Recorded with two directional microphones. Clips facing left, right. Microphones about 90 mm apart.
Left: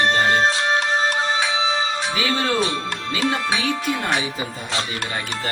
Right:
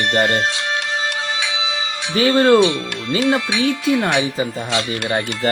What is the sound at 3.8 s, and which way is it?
Speech, 35° left (ahead or behind).